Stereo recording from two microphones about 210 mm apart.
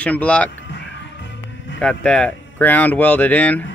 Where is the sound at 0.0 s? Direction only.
5° left (ahead or behind).